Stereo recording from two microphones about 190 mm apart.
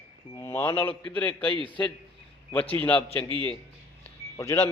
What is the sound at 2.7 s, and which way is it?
Speech, 10° left (ahead or behind).